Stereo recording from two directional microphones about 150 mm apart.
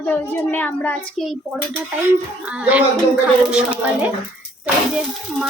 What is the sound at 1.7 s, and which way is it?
Speech, 10° right (ahead or behind).